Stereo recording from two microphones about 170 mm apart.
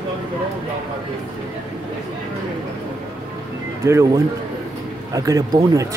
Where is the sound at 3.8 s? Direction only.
15° right (ahead or behind).